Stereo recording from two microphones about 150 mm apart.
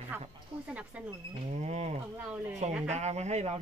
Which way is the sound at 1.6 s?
45° right (ahead or behind).